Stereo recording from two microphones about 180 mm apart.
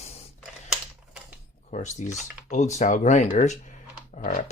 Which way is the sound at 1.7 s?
40° left (ahead or behind).